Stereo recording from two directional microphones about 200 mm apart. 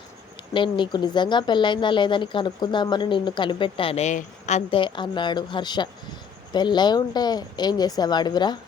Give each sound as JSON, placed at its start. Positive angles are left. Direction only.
{"t": 0.5, "sound": "a woman's voice", "side_deg": 25}